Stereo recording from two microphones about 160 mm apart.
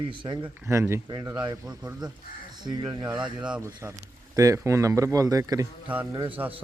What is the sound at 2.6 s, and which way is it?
Speech, 25° right (ahead or behind).